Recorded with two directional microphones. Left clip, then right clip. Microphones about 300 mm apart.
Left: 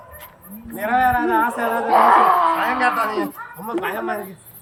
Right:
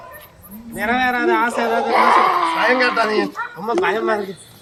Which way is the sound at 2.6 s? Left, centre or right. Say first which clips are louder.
Right 3 dB; centre.